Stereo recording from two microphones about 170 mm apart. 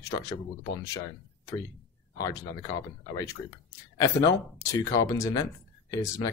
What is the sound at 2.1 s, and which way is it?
Speech, 20° left (ahead or behind).